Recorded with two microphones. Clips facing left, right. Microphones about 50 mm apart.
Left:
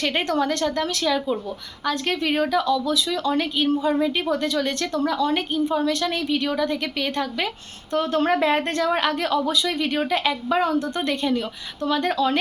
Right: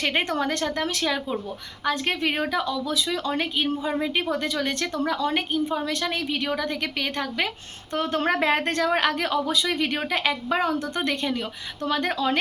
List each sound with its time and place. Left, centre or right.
0.0 s a woman's voice: right